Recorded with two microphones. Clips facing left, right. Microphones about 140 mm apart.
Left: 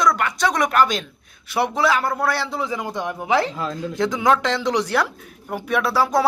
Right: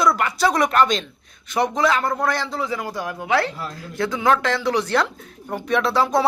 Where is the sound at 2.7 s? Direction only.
20° left (ahead or behind).